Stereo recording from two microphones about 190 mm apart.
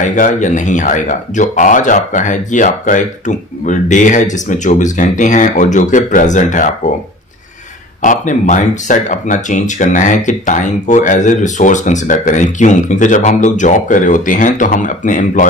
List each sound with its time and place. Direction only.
0.0 s speech: 40° left (ahead or behind)
8.0 s speech: 40° left (ahead or behind)